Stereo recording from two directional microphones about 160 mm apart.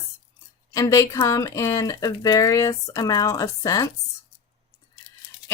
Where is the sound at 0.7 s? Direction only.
20° left (ahead or behind).